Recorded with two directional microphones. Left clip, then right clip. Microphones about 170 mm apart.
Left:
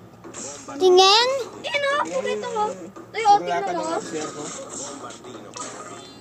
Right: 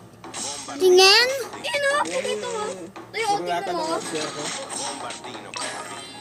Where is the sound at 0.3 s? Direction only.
20° right (ahead or behind).